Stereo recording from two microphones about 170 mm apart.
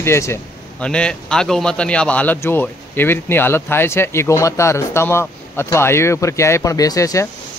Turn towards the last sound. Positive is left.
turn(degrees=20)  # may be behind; listen again after turning